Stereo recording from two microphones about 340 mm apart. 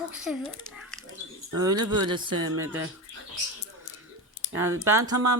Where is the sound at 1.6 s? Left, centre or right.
Centre.